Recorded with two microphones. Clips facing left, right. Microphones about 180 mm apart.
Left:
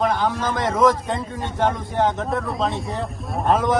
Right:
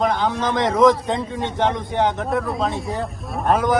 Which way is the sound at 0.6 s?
20° right (ahead or behind).